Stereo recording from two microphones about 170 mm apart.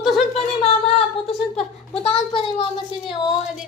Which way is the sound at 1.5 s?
35° left (ahead or behind).